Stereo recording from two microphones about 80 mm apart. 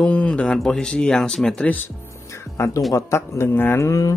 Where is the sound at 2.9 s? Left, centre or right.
Left.